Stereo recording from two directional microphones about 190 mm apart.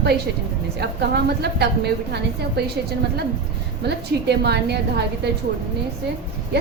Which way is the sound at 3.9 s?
60° right (ahead or behind).